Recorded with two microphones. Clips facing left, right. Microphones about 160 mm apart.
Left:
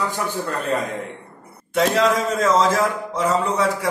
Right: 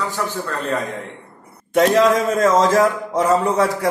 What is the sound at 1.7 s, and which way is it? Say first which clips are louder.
A man's voice: right 4 dB; 50° right (ahead or behind).